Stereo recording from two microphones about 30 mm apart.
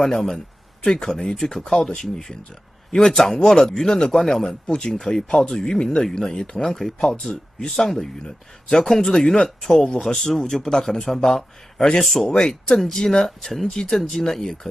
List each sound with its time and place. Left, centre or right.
0.0 s speech: centre
1.3 s speech: centre
1.6 s speech: left
2.0 s speech: centre
6.6 s speech: centre
7.1 s speech: left
7.7 s speech: centre
12.3 s speech: left
13.4 s speech: centre